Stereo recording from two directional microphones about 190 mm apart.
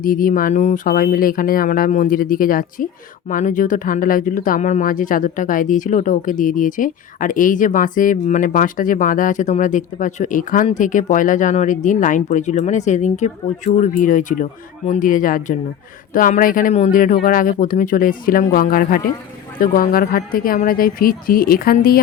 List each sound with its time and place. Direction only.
0.0 s speech: 45° left (ahead or behind)